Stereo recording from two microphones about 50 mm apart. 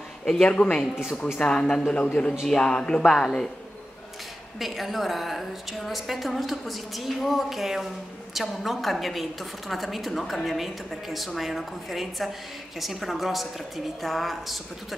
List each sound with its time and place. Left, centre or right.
0.2 s speech: centre
3.1 s speech: centre
4.6 s a woman's voice: centre